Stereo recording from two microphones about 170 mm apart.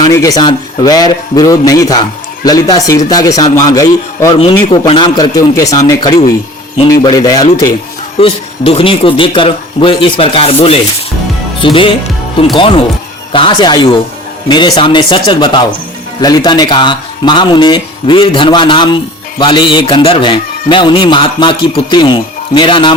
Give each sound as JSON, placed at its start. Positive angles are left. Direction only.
{"t": 0.0, "sound": "a man's voice", "side_deg": 20}